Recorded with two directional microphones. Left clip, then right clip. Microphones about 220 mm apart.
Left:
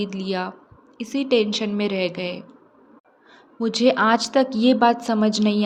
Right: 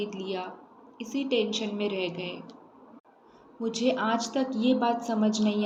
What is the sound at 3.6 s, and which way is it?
A woman's voice, 50° left (ahead or behind).